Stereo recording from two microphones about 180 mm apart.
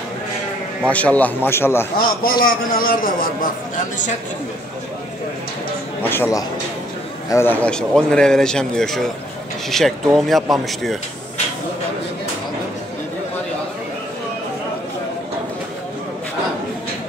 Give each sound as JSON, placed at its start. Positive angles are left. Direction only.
{"t": 0.8, "sound": "a man's voice", "side_deg": 10}
{"t": 2.0, "sound": "a man's voice", "side_deg": 55}
{"t": 6.0, "sound": "a man's voice", "side_deg": 10}